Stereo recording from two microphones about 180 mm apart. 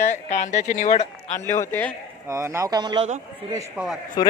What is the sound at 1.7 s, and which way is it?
Speech, 10° left (ahead or behind).